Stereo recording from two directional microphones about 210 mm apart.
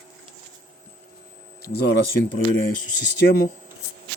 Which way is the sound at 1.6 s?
50° left (ahead or behind).